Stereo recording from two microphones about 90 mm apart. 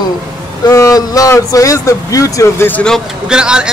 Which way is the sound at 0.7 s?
35° left (ahead or behind).